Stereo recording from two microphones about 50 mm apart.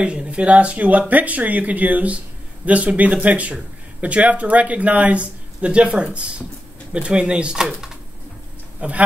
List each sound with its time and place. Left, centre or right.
0.0 s speech: right
8.8 s speech: right